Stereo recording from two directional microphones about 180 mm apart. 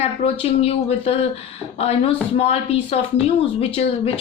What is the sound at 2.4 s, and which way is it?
Speech, 35° left (ahead or behind).